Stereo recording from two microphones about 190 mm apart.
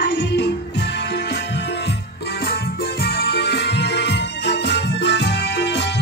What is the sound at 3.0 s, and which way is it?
Music, 55° left (ahead or behind).